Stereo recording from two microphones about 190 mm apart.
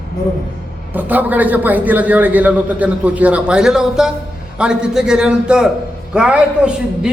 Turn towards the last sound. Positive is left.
turn(degrees=-5)  # may be behind; listen again after turning